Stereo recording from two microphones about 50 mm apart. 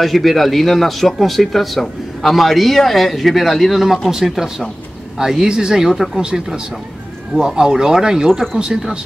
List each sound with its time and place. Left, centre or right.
0.0 s a man's voice: centre